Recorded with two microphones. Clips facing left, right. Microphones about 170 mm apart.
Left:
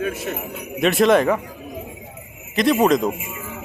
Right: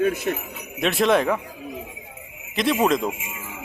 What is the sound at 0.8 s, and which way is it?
Speech, centre (ahead or behind).